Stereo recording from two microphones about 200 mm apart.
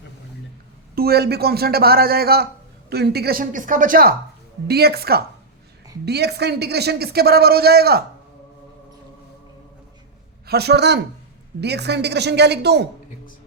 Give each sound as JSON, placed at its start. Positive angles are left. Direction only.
{"t": 0.9, "sound": "speech", "side_deg": -50}
{"t": 10.4, "sound": "a woman's voice", "side_deg": -55}